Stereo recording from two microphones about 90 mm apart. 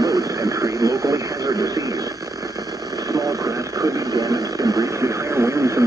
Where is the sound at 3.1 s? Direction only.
40° right (ahead or behind).